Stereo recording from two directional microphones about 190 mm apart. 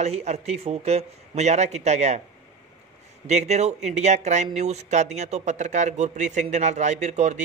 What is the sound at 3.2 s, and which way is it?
Speech, 35° right (ahead or behind).